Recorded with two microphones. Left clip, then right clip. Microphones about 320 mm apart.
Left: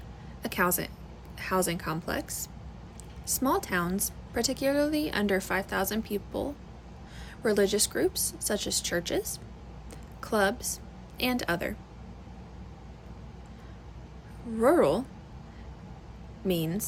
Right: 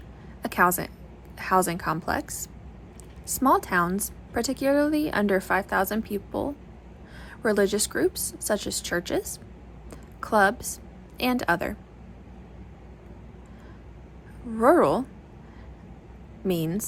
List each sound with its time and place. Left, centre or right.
0.4 s a woman's voice: centre
9.9 s a sound: centre
11.2 s a woman's voice: centre
14.6 s a woman's voice: centre
16.5 s a woman's voice: centre